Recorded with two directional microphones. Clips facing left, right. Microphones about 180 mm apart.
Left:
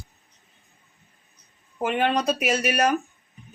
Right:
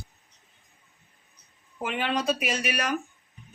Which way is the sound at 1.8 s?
45° left (ahead or behind).